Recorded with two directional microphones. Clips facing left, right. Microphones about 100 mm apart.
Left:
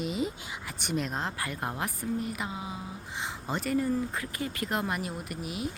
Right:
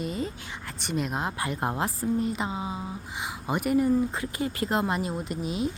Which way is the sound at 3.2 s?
15° right (ahead or behind).